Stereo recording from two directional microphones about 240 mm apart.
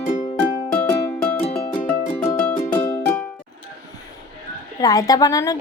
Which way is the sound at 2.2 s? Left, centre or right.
Centre.